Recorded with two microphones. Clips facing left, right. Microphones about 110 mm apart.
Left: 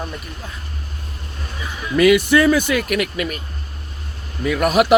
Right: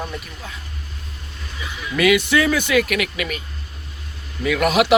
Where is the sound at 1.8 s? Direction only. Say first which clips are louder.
Left 4 dB; 40° left (ahead or behind).